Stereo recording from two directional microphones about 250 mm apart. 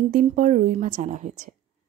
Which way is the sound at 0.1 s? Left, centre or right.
Right.